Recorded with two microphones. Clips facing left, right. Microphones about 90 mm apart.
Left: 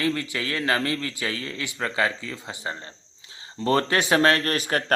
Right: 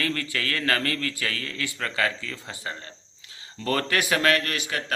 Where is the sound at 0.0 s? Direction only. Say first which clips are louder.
Left 2 dB; 20° left (ahead or behind).